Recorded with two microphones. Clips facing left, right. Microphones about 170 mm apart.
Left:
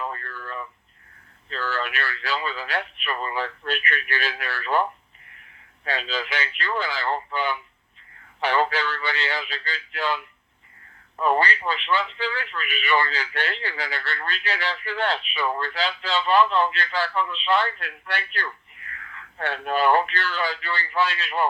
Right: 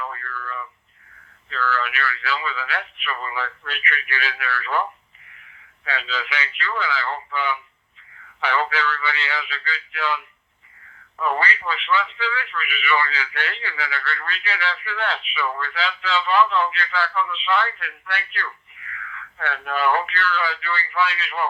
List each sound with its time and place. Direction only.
0.0 s a sound: 35° left (ahead or behind)
1.5 s a man's voice: 35° left (ahead or behind)
11.2 s a man's voice: 35° left (ahead or behind)